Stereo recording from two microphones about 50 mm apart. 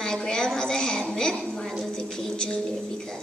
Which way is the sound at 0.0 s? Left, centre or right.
Centre.